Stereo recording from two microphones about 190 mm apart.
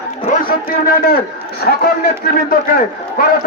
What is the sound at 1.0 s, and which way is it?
Speech, 55° left (ahead or behind).